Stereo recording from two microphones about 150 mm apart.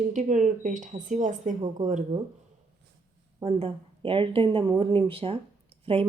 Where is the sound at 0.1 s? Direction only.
55° right (ahead or behind).